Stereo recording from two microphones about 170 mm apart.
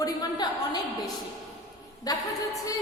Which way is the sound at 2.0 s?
20° left (ahead or behind).